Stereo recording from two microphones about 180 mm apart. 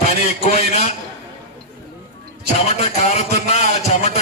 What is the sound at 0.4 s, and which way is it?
Speech, 40° left (ahead or behind).